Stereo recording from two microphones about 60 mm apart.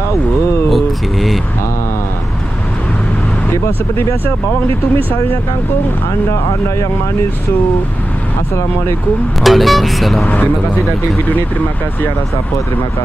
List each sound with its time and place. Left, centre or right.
0.7 s speech: centre
3.6 s speech: left
9.4 s speech: centre
10.2 s speech: left